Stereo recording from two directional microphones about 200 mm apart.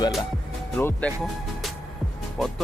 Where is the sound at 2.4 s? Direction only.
Centre (ahead or behind).